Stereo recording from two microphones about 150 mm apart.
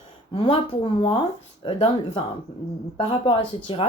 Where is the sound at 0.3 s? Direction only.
40° left (ahead or behind).